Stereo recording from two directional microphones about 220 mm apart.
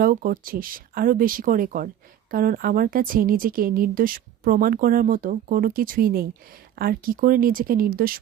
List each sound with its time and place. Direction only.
0.0 s a woman's voice: 40° right (ahead or behind)